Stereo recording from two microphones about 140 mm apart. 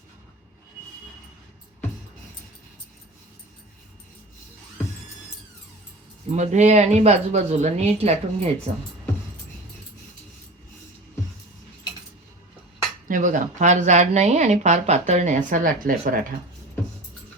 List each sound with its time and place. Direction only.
6.3 s speech: 55° right (ahead or behind)
13.1 s speech: 65° right (ahead or behind); by 16.2 s 85° right